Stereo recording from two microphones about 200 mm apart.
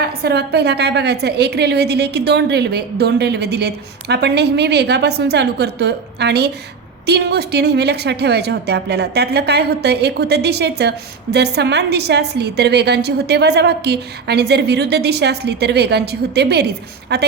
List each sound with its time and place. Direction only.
0.0 s a woman's voice: 55° right (ahead or behind)